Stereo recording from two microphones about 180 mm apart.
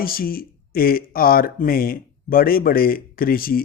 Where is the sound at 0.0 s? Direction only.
55° left (ahead or behind).